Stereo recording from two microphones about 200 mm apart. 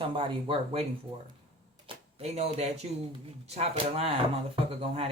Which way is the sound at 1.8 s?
30° right (ahead or behind).